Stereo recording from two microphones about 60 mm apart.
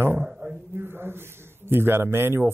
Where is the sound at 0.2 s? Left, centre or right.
Centre.